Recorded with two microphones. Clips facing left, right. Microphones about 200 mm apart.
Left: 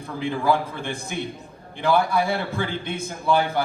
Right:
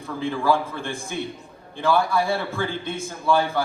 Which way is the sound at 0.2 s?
20° left (ahead or behind).